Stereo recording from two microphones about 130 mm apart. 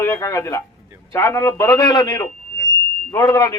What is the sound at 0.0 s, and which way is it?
A man's voice, 20° left (ahead or behind).